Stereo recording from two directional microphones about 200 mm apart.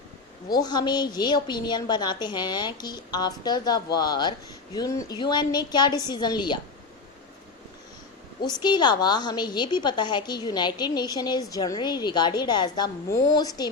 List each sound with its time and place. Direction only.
0.5 s a woman's voice: 20° left (ahead or behind)
8.4 s a woman's voice: 20° left (ahead or behind)